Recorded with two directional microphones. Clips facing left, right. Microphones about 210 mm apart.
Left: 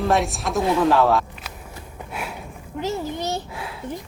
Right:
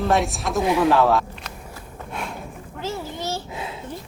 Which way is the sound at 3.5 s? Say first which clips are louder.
Right 2 dB; 20° right (ahead or behind).